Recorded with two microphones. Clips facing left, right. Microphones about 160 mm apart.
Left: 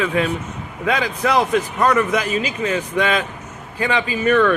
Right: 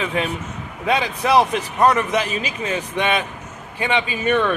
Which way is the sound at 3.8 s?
25° right (ahead or behind).